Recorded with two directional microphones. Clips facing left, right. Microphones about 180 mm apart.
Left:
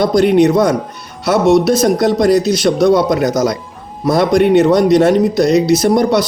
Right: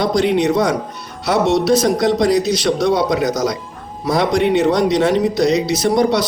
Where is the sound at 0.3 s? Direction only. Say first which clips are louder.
Left 5 dB; 50° left (ahead or behind).